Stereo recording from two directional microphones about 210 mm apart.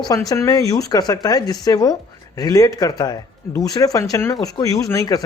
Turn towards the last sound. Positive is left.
turn(degrees=15)  # may be behind; listen again after turning